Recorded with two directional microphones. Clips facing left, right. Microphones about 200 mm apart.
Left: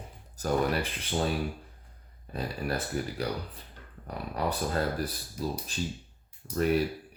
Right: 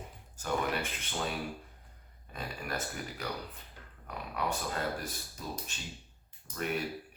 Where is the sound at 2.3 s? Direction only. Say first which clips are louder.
Left 6 dB; 35° left (ahead or behind).